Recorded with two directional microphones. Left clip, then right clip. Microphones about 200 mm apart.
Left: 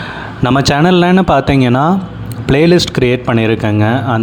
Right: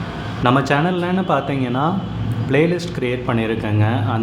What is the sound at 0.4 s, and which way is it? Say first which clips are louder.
Speech: left 5 dB; 50° left (ahead or behind).